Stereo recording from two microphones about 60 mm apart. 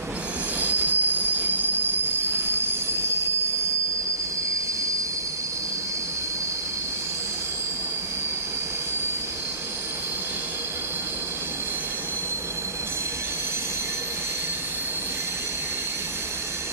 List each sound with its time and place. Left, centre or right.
0.6 s train wheels squealing: right